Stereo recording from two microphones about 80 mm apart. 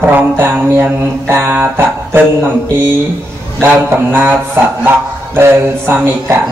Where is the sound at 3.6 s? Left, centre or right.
Right.